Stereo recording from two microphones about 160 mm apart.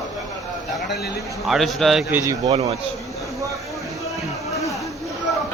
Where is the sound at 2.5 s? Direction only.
40° right (ahead or behind).